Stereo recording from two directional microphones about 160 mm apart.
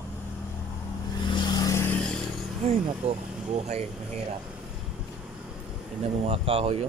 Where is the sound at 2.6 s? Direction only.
40° right (ahead or behind).